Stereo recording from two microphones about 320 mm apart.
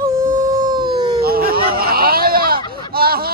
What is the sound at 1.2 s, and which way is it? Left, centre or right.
Speech, right.